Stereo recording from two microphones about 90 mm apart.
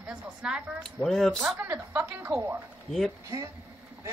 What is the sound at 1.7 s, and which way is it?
Speech, 25° right (ahead or behind).